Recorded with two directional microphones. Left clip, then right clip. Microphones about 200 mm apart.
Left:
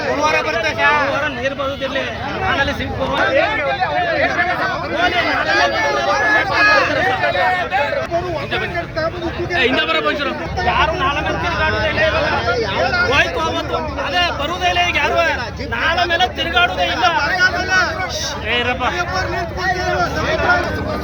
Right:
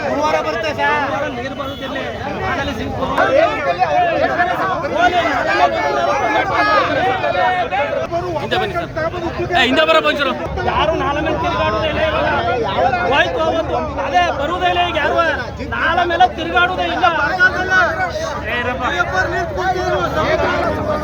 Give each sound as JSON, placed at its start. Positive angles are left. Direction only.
{"t": 4.9, "sound": "speech", "side_deg": 15}
{"t": 6.1, "sound": "chatter", "side_deg": 25}
{"t": 9.6, "sound": "a man's voice", "side_deg": -55}
{"t": 10.7, "sound": "speech", "side_deg": 10}